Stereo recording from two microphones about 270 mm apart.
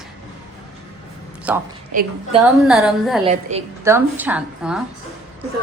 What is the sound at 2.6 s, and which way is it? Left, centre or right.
Speech, centre.